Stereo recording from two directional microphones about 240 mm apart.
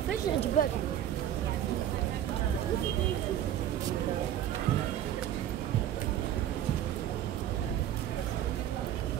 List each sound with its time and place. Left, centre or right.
0.6 s speech: left